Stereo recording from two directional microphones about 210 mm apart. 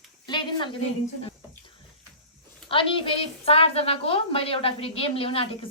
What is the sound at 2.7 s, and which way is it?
A woman's voice, 25° left (ahead or behind).